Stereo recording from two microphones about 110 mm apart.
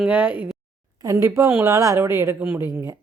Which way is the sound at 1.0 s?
25° right (ahead or behind).